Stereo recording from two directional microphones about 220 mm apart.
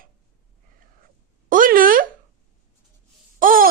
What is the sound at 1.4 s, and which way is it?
Speech, 40° right (ahead or behind).